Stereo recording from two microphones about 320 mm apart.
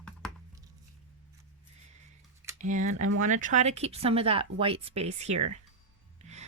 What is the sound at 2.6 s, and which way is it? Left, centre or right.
Speech, right.